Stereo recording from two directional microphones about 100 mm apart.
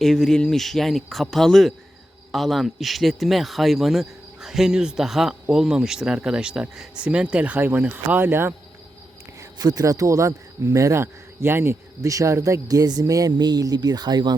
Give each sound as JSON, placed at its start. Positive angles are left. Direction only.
{"t": 0.0, "sound": "speech", "side_deg": 5}
{"t": 9.4, "sound": "speech", "side_deg": -40}